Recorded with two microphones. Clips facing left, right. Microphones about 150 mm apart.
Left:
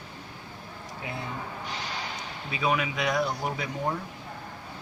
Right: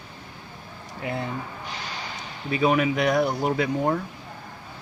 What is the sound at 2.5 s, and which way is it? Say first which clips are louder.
Speech: right 7 dB; 50° right (ahead or behind).